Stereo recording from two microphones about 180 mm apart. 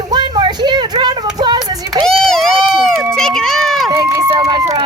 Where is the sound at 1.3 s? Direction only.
25° right (ahead or behind).